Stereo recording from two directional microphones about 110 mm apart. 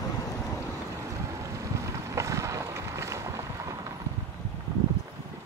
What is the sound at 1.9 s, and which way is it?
Boat, 30° right (ahead or behind).